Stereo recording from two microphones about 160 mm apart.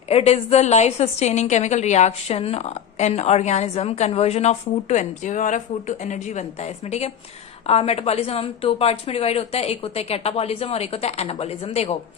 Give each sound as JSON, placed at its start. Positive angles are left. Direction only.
{"t": 0.1, "sound": "a woman's voice", "side_deg": 40}